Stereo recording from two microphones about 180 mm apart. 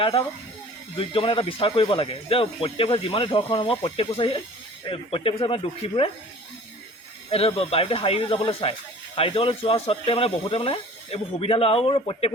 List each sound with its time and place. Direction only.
0.0 s speech: 30° left (ahead or behind)
7.3 s speech: 30° left (ahead or behind)